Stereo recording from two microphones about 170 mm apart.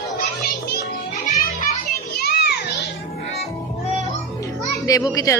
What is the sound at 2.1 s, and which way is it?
Children playing, 70° left (ahead or behind).